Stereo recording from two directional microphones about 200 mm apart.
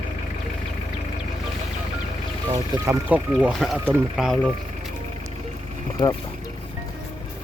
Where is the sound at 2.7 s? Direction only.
20° left (ahead or behind).